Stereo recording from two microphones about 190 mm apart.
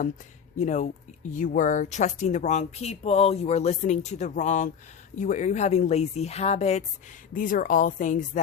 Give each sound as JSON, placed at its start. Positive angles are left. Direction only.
{"t": 0.6, "sound": "a woman's voice", "side_deg": 40}